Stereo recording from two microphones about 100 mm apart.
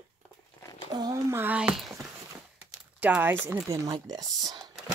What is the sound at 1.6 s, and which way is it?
Speech, 10° right (ahead or behind).